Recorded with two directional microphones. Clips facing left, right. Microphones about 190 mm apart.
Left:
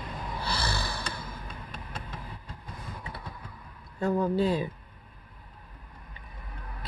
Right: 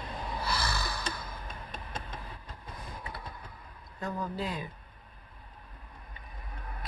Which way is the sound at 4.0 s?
30° left (ahead or behind).